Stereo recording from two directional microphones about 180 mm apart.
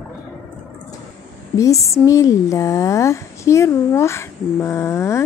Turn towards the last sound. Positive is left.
turn(degrees=15)  # may be behind; listen again after turning